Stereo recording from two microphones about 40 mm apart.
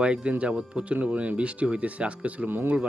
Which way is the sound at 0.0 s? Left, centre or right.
Right.